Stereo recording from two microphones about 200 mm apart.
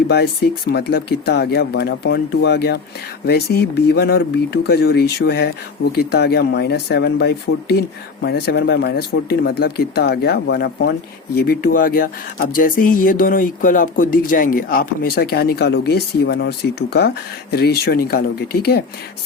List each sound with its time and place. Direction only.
0.1 s speech: 55° left (ahead or behind)